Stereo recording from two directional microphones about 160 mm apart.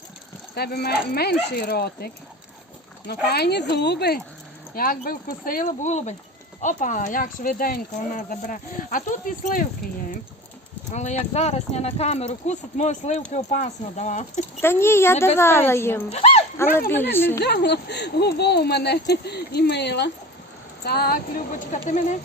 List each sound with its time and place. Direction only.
0.5 s speech: 80° left
3.1 s speech: 90° left
4.7 s speech: 65° left (ahead or behind)
10.9 s speech: 45° left (ahead or behind)
14.6 s speech: 15° left (ahead or behind)
16.0 s speech: 40° left (ahead or behind)
16.6 s speech: 15° left (ahead or behind)
17.4 s speech: 90° left
20.8 s speech: 75° left (ahead or behind); by 22.2 s 50° left (ahead or behind)